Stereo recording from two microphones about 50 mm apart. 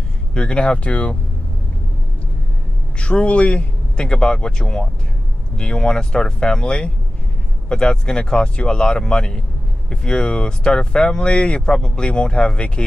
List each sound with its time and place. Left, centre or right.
0.3 s speech: centre
3.0 s speech: left